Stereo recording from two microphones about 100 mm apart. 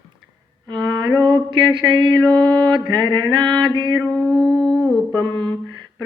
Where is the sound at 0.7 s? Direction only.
50° right (ahead or behind).